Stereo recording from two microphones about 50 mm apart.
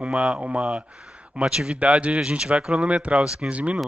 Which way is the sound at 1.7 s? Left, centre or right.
Right.